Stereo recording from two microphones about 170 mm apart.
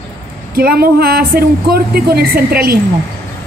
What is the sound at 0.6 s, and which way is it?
Speech, 65° right (ahead or behind).